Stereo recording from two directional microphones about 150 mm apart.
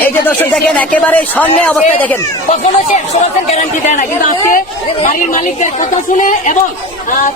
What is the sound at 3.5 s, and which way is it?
A woman's voice, 55° left (ahead or behind).